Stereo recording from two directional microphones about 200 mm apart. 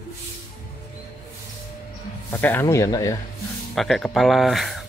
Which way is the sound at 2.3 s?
10° left (ahead or behind).